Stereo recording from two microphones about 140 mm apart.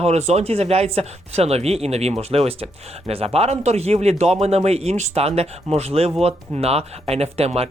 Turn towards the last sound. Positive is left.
turn(degrees=-45)  # may be behind; listen again after turning